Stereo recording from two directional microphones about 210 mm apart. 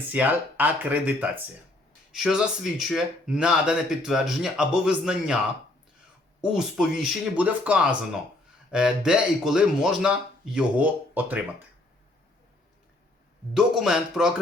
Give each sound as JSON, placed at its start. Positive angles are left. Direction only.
{"t": 0.1, "sound": "speech", "side_deg": -10}
{"t": 6.4, "sound": "speech", "side_deg": -5}
{"t": 13.5, "sound": "speech", "side_deg": -5}